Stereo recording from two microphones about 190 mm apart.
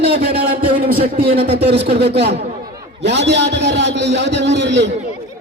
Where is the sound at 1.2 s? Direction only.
30° right (ahead or behind).